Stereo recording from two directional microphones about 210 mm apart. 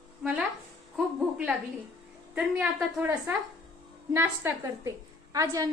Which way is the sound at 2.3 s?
Centre (ahead or behind).